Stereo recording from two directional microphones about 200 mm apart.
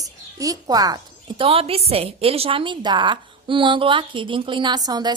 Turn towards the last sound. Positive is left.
turn(degrees=-20)  # may be behind; listen again after turning